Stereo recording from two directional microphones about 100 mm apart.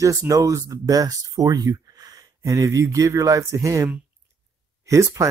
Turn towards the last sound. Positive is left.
turn(degrees=-30)  # may be behind; listen again after turning